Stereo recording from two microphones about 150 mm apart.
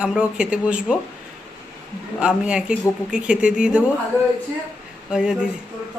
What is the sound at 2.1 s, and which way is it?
Speech, 5° right (ahead or behind).